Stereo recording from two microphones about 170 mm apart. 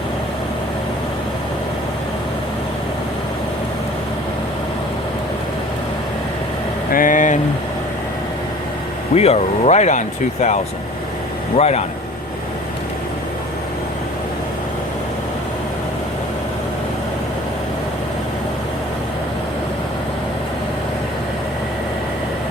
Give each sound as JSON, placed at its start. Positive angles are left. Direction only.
{"t": 6.9, "sound": "vehicle", "side_deg": 50}
{"t": 9.1, "sound": "speech", "side_deg": 40}
{"t": 11.5, "sound": "speech", "side_deg": 40}